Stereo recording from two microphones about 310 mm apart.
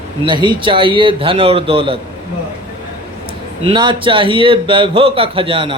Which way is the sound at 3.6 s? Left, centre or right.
Centre.